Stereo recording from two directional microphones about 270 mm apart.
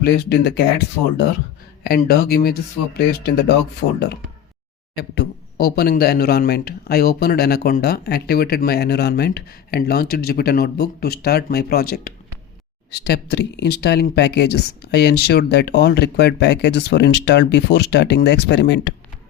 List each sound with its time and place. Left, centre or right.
0.0 s speech: left